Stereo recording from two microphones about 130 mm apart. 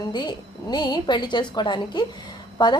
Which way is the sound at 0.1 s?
35° left (ahead or behind).